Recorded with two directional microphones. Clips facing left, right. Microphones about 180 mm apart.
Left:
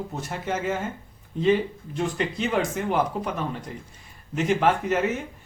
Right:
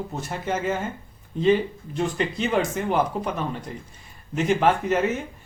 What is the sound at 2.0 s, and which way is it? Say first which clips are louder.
Speech: right 1 dB; 30° right (ahead or behind).